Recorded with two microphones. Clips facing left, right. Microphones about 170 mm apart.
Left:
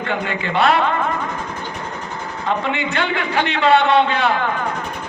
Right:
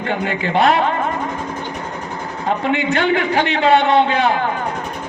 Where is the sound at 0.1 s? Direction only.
50° right (ahead or behind).